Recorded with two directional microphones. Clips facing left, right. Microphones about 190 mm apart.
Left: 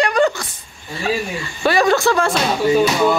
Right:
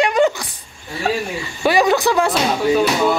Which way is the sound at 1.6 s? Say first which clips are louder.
Even; 15° right (ahead or behind).